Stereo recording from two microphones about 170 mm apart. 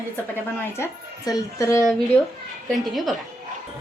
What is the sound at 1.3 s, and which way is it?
Speech, 20° left (ahead or behind).